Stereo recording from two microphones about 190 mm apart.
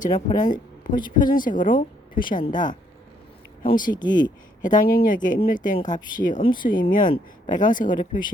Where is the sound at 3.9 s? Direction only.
20° left (ahead or behind).